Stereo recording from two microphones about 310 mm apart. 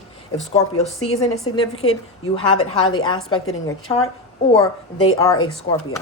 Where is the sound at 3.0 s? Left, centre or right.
Centre.